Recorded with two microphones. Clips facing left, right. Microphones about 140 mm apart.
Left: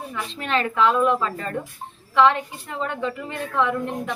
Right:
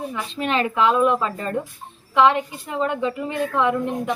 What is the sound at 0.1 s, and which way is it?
A woman's voice, 10° right (ahead or behind).